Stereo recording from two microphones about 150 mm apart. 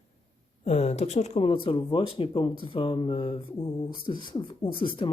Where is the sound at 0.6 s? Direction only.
45° left (ahead or behind).